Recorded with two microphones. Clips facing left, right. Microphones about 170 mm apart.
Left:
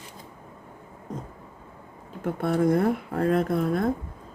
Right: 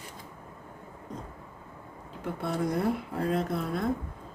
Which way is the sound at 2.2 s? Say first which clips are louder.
Left 7 dB; 50° left (ahead or behind).